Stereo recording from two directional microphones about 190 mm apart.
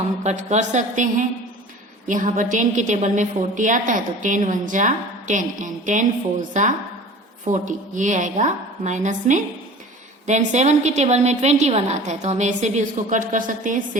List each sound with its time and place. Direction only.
0.2 s a woman's voice: 35° right (ahead or behind)